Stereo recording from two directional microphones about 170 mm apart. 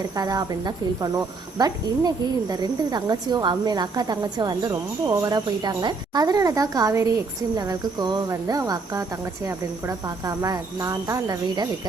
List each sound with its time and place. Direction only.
0.2 s speech: 20° right (ahead or behind)